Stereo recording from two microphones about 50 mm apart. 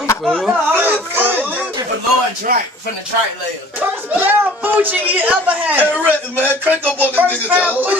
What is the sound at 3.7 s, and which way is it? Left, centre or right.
A woman's voice, right.